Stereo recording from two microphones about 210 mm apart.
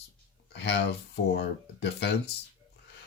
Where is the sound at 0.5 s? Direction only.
55° left (ahead or behind).